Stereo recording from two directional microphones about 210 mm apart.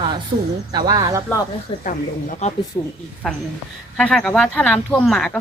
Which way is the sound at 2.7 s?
15° left (ahead or behind).